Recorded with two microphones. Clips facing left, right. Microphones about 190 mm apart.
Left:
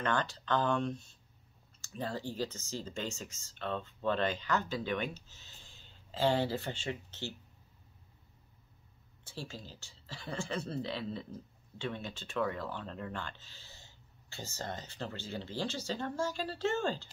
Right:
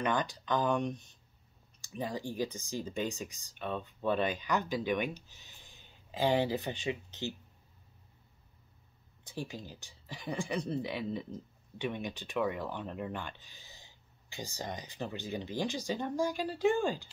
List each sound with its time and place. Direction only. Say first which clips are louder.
0.0 s speech: right 1 dB; 15° right (ahead or behind)
9.2 s speech: right 4 dB; 15° right (ahead or behind)